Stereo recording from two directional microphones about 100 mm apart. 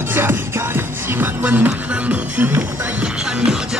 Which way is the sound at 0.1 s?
20° right (ahead or behind).